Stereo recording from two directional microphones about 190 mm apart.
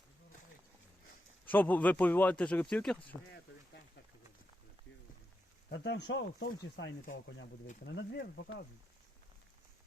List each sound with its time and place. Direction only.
1.5 s speech: 10° left (ahead or behind)
5.7 s speech: 75° left (ahead or behind)
7.9 s speech: 60° left (ahead or behind)